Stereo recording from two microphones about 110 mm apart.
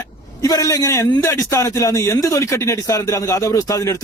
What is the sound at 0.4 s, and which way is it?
Speech, 30° left (ahead or behind).